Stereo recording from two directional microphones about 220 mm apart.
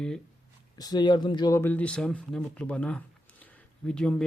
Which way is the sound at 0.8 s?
20° left (ahead or behind).